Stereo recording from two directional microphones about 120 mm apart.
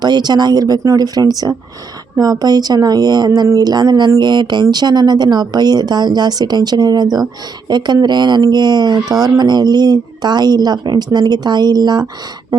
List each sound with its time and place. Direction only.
0.0 s speech: 35° right (ahead or behind)